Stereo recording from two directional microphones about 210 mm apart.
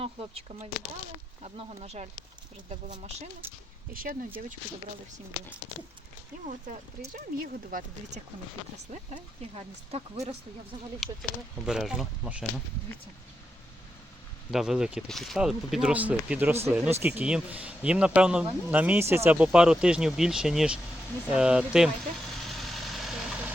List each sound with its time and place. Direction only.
0.0 s speech: 30° right (ahead or behind)
3.9 s speech: 40° right (ahead or behind)
7.1 s speech: 40° right (ahead or behind)
11.0 s speech: centre (ahead or behind)
14.5 s speech: centre (ahead or behind)
22.4 s vehicle: centre (ahead or behind)